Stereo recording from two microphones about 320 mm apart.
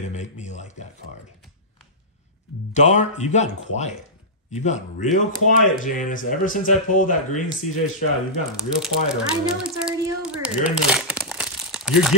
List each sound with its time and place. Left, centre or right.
0.1 s speech: left
2.7 s speech: left
8.6 s speech: centre